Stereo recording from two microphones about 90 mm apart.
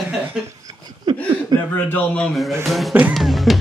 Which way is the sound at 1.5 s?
50° right (ahead or behind).